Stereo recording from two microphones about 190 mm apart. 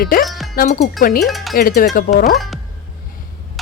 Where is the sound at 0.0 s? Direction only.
50° left (ahead or behind).